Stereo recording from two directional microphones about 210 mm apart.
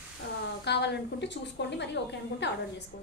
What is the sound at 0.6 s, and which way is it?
A woman's voice, 55° left (ahead or behind).